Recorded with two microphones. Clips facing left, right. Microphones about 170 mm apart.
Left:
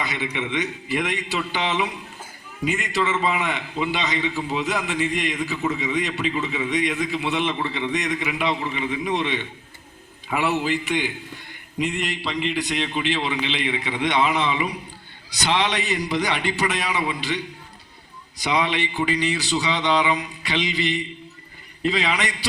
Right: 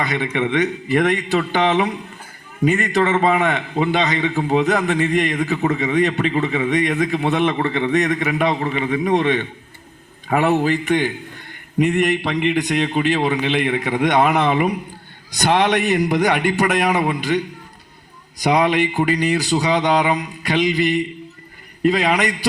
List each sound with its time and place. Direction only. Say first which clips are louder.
0.0 s a man's voice: right 7 dB; 55° right (ahead or behind)
18.4 s a man's voice: right 7 dB; 45° right (ahead or behind)